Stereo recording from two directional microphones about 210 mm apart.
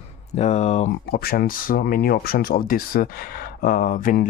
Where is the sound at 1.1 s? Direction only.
45° left (ahead or behind).